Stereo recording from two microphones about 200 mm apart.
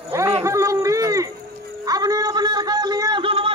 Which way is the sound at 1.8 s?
20° right (ahead or behind).